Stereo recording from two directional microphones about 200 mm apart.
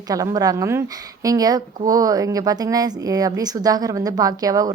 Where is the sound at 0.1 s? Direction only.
15° right (ahead or behind).